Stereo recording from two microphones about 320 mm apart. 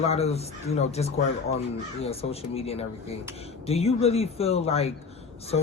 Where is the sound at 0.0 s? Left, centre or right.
Centre.